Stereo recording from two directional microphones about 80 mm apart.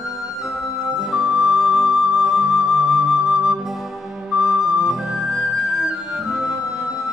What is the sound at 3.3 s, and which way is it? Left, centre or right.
Music, centre.